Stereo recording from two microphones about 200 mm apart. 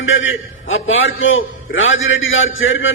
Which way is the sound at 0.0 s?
75° left (ahead or behind).